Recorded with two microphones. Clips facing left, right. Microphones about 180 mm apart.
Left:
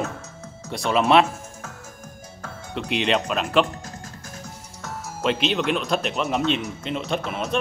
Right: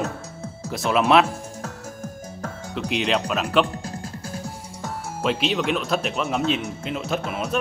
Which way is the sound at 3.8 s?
30° right (ahead or behind).